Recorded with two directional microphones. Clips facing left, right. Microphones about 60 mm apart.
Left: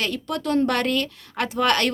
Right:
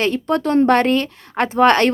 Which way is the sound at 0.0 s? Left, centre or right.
Right.